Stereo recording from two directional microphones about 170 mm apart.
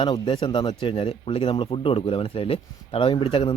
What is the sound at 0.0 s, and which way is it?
A man's voice, 30° left (ahead or behind).